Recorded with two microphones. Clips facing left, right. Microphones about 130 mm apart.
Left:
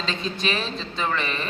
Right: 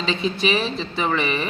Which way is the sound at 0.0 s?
10° right (ahead or behind).